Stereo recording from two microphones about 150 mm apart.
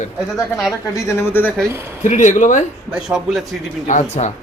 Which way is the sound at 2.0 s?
55° left (ahead or behind).